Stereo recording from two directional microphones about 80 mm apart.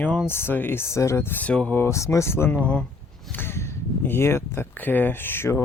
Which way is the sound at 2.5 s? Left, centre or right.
Centre.